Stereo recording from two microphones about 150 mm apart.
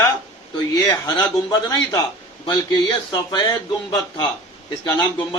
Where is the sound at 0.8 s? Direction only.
25° left (ahead or behind).